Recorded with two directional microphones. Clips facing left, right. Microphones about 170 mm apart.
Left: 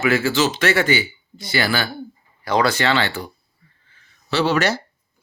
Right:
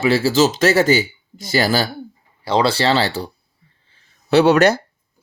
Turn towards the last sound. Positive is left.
turn(degrees=-55)  # may be behind; listen again after turning